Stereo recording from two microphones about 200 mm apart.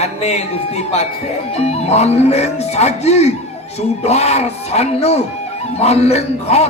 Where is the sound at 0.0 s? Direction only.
30° left (ahead or behind).